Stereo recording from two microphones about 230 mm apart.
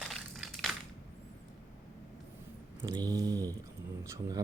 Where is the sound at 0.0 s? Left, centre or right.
Centre.